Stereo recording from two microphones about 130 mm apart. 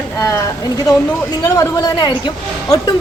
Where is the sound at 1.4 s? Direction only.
30° left (ahead or behind).